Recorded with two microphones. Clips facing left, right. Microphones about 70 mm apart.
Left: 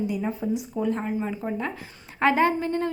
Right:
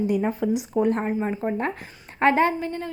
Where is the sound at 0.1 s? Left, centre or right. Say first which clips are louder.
Right 4 dB; right.